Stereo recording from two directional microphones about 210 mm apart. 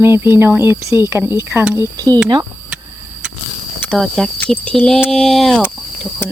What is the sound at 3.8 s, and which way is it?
Speech, 5° left (ahead or behind).